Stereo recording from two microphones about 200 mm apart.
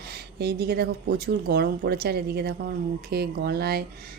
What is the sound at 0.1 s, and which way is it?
A woman's voice, 55° right (ahead or behind).